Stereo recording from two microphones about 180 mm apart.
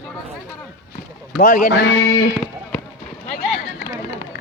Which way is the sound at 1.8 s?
80° left.